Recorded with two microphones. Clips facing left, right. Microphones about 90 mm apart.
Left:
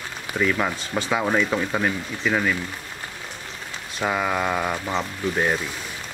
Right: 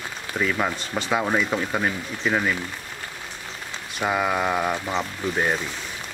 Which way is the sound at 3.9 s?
5° right (ahead or behind).